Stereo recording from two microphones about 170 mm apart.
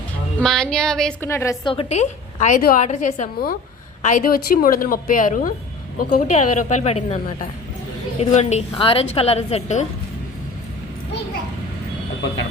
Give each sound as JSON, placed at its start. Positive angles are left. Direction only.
{"t": 0.3, "sound": "female singing", "side_deg": 5}
{"t": 1.2, "sound": "a woman's voice", "side_deg": 15}
{"t": 1.6, "sound": "a woman's voice", "side_deg": 30}
{"t": 2.8, "sound": "a woman's voice", "side_deg": 45}
{"t": 6.3, "sound": "a woman's voice", "side_deg": 45}
{"t": 8.2, "sound": "a woman's voice", "side_deg": 40}